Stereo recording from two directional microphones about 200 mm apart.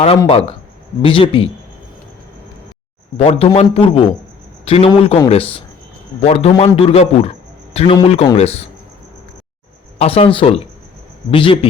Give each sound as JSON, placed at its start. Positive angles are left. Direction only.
{"t": 0.3, "sound": "a man's voice", "side_deg": 30}
{"t": 3.2, "sound": "a man's voice", "side_deg": 30}
{"t": 10.0, "sound": "a man's voice", "side_deg": 30}